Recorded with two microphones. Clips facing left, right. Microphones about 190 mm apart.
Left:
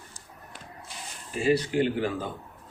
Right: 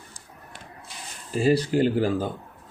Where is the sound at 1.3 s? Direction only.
35° right (ahead or behind).